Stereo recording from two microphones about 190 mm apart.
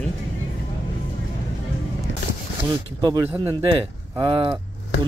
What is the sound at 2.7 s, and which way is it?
Speech, 20° right (ahead or behind).